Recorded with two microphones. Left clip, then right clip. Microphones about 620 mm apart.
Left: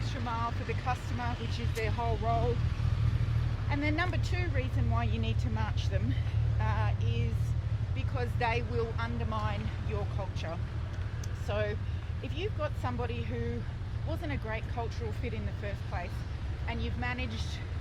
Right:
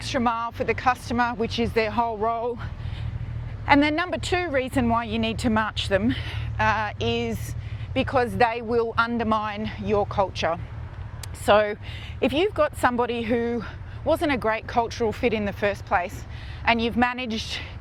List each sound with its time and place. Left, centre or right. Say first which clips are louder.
0.0 s a woman's voice: right 11 dB; right
3.7 s a woman's voice: right 13 dB; right